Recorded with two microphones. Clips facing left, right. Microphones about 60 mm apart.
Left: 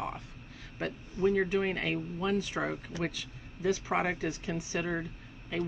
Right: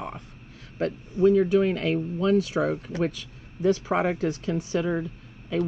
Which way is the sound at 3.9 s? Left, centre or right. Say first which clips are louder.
Right 6 dB; right.